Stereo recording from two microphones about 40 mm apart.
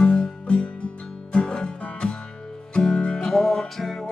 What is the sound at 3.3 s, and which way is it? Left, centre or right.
Music, centre.